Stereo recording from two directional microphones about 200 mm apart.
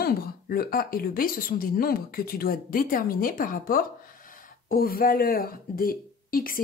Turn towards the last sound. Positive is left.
turn(degrees=45)  # may be behind; listen again after turning